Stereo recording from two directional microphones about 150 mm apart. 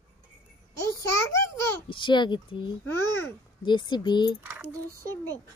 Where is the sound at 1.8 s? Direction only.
35° left (ahead or behind).